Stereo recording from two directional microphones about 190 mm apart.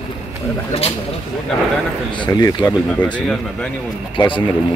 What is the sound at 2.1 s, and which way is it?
Speech, 20° left (ahead or behind).